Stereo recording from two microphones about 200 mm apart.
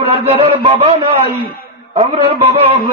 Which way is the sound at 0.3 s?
30° right (ahead or behind).